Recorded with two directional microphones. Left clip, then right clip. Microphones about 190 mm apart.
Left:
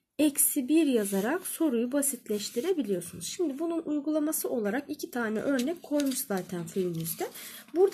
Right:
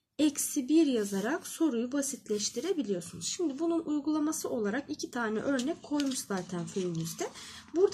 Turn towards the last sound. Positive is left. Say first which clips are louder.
# left 2 dB
turn(degrees=30)  # may be behind; listen again after turning